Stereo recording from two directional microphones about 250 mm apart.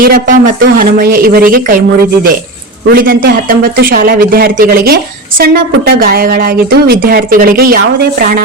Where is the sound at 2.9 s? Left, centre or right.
Right.